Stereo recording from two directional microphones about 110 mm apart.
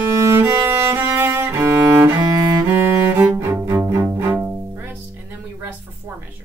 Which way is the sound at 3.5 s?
25° right (ahead or behind).